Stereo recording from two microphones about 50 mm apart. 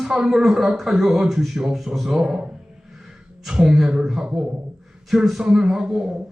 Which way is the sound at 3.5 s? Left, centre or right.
Centre.